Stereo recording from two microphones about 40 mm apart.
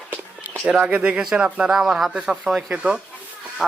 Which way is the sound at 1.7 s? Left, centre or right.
Centre.